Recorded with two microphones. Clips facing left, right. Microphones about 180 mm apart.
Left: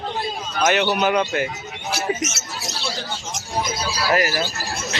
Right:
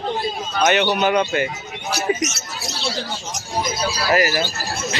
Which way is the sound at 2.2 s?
25° left (ahead or behind).